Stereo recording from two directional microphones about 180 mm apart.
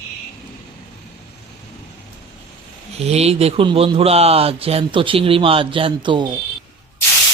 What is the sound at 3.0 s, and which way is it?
Speech, 35° right (ahead or behind).